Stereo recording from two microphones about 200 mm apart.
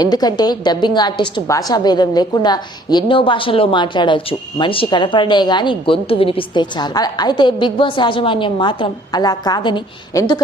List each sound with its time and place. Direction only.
0.0 s a woman's voice: 20° left (ahead or behind)